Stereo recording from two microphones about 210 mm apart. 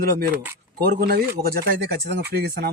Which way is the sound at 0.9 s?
50° right (ahead or behind).